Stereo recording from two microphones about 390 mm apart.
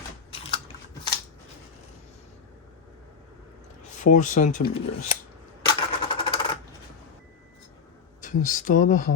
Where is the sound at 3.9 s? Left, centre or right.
Centre.